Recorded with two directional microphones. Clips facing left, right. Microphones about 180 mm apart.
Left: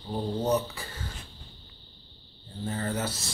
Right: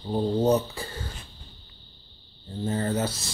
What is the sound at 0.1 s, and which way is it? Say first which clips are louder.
Speech: right 5 dB; 25° right (ahead or behind).